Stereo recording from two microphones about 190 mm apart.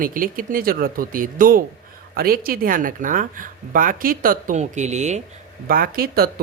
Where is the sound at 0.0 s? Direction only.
45° right (ahead or behind).